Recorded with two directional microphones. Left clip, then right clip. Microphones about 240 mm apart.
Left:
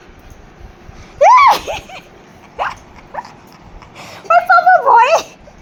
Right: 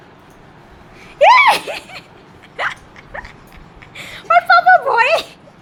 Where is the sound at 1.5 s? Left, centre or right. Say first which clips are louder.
Left 2 dB; centre.